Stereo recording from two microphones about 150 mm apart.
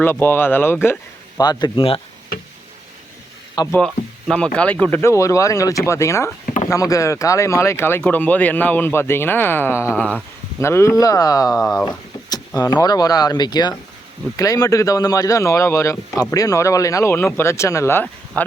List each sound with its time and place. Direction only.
0.0 s speech: 15° left (ahead or behind)
1.4 s speech: 30° left (ahead or behind)
3.7 s speech: 5° left (ahead or behind)
6.4 s a sound: 55° left (ahead or behind)
6.7 s speech: 20° left (ahead or behind); by 10.2 s 5° left (ahead or behind)
10.6 s speech: 20° left (ahead or behind)
12.5 s speech: 25° left (ahead or behind)